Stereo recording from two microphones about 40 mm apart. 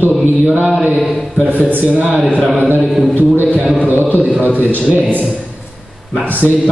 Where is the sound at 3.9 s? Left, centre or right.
Left.